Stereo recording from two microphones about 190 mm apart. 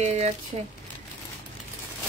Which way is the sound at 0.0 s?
35° right (ahead or behind).